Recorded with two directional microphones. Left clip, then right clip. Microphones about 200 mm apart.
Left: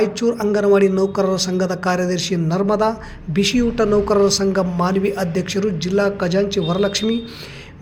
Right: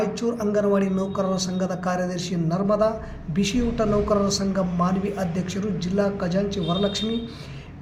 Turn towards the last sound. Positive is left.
turn(degrees=50)  # may be behind; listen again after turning